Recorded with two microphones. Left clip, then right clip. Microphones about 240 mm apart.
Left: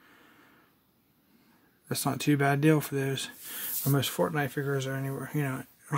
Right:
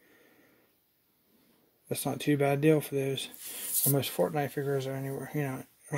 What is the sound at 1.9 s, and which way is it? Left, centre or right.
Speech, centre.